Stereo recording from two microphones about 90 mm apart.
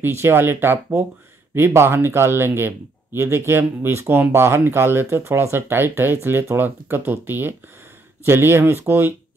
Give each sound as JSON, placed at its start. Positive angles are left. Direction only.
{"t": 0.0, "sound": "speech", "side_deg": -25}